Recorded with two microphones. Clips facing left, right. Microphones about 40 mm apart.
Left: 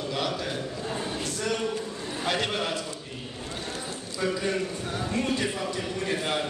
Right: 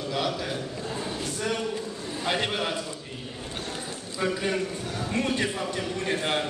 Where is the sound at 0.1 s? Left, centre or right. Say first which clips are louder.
Right 2 dB; centre.